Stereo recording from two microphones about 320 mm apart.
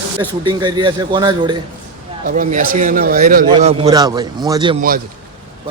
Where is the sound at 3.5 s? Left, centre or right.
Centre.